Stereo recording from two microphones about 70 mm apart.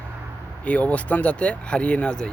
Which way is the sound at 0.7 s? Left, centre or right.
Left.